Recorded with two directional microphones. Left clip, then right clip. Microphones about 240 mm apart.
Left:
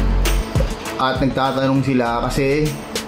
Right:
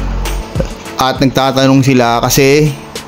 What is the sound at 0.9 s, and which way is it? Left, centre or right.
A man's voice, right.